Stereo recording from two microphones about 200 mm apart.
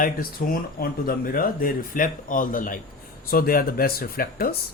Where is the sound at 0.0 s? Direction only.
45° left (ahead or behind).